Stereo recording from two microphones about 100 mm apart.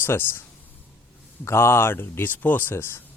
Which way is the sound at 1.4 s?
25° left (ahead or behind).